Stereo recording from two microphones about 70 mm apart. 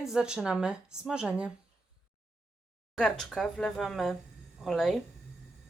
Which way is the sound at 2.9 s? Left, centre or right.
Centre.